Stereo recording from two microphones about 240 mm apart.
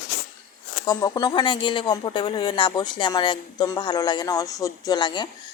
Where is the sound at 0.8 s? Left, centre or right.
Centre.